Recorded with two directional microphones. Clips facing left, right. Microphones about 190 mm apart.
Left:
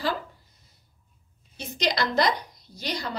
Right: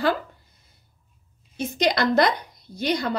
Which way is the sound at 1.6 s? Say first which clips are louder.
Right 5 dB; 55° right (ahead or behind).